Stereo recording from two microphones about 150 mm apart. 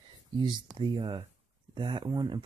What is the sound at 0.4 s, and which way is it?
Speech, 30° right (ahead or behind).